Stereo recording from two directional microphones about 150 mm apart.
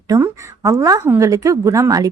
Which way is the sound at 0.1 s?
20° right (ahead or behind).